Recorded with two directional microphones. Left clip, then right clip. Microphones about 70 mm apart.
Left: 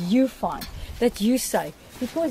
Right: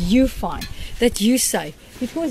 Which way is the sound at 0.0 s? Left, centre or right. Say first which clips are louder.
Right 3 dB; right.